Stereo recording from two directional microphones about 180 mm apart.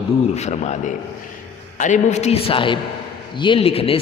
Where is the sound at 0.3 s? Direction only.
40° left (ahead or behind).